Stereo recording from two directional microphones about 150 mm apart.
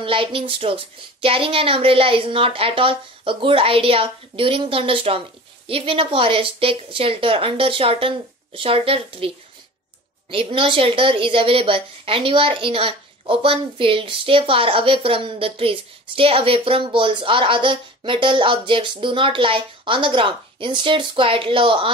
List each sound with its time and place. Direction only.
0.0 s a woman's voice: 35° right (ahead or behind)
10.3 s a woman's voice: 35° right (ahead or behind)